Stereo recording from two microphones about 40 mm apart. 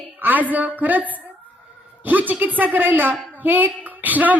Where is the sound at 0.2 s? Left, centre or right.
Right.